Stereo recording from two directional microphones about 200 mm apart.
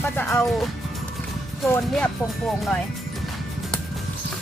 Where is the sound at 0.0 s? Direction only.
10° left (ahead or behind).